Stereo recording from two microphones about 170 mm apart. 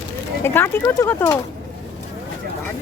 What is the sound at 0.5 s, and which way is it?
Speech, 15° left (ahead or behind).